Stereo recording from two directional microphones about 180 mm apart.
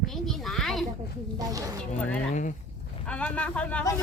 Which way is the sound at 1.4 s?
20° right (ahead or behind).